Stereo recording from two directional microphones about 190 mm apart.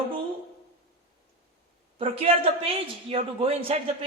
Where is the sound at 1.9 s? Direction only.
30° right (ahead or behind).